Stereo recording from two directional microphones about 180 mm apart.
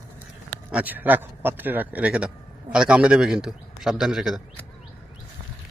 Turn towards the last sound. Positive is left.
turn(degrees=0)  # may be behind; listen again after turning